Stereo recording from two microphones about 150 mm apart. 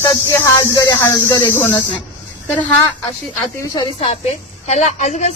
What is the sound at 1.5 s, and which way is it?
Speech, 10° left (ahead or behind).